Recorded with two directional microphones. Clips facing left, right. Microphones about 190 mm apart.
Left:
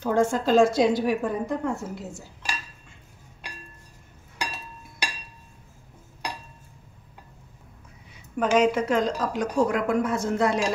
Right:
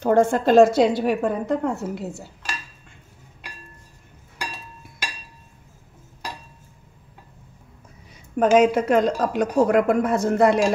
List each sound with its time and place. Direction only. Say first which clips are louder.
0.0 s a woman's voice: right 5 dB; 55° right (ahead or behind)
8.4 s a woman's voice: right 5 dB; 55° right (ahead or behind)